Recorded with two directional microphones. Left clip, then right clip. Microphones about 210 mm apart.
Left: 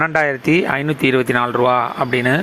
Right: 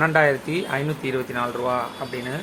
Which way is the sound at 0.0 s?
35° left (ahead or behind).